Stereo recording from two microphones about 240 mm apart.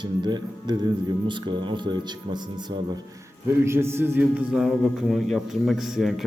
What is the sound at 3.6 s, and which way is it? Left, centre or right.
Speech, centre.